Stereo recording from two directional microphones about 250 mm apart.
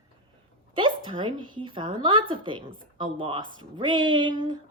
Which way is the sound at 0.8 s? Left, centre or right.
Centre.